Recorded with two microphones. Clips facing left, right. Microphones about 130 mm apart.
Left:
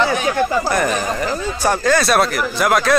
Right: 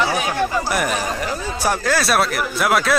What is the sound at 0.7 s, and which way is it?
Speech, 5° right (ahead or behind).